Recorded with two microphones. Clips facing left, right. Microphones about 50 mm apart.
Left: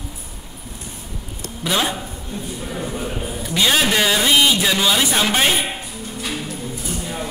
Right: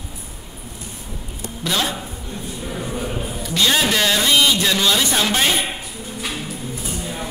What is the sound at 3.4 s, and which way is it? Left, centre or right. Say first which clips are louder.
A man's voice: left 1 dB; centre.